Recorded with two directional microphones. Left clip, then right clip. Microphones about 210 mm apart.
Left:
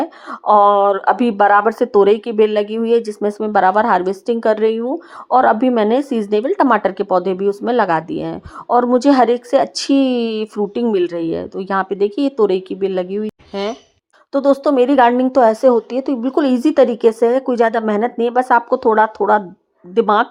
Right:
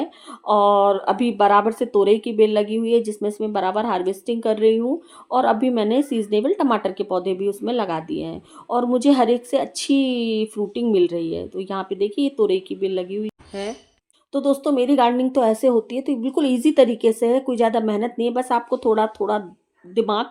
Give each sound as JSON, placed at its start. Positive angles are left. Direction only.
{"t": 0.0, "sound": "a woman's voice", "side_deg": 20}